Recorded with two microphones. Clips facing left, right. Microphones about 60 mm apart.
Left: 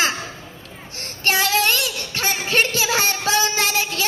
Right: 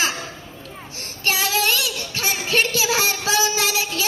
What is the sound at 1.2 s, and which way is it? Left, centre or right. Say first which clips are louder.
Child singing: left 2 dB; left.